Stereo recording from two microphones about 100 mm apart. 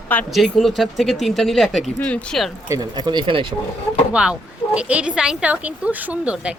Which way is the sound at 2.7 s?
45° right (ahead or behind).